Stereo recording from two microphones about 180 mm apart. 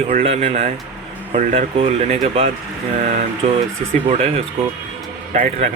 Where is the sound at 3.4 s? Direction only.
40° right (ahead or behind).